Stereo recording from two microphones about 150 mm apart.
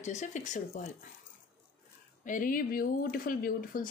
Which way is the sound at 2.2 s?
65° left (ahead or behind).